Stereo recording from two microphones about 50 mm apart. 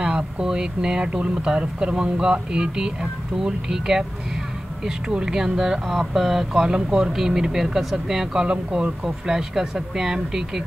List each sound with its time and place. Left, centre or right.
0.0 s speech: centre
8.5 s speech: right
9.0 s speech: centre